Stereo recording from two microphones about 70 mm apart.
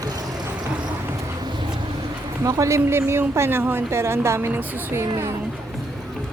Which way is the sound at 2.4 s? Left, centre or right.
Right.